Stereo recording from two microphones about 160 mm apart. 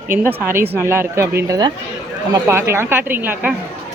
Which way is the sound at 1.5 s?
25° right (ahead or behind).